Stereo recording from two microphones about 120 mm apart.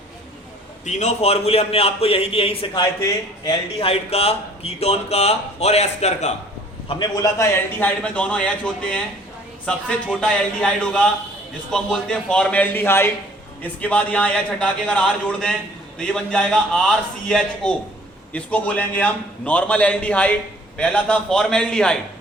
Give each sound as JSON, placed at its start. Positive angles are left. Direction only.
{"t": 0.9, "sound": "speech", "side_deg": 75}
{"t": 7.2, "sound": "a man's voice", "side_deg": 25}
{"t": 7.8, "sound": "a man's voice", "side_deg": 10}